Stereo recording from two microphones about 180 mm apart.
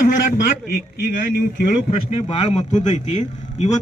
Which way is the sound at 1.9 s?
35° left (ahead or behind).